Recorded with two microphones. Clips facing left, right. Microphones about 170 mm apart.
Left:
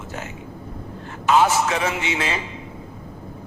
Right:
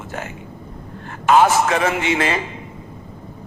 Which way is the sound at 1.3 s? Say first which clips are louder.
Right 3 dB; 50° right (ahead or behind).